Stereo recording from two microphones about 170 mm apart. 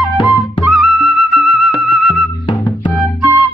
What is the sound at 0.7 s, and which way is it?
Music, centre (ahead or behind).